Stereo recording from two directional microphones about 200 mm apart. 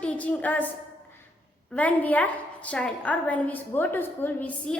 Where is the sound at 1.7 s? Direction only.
5° left (ahead or behind).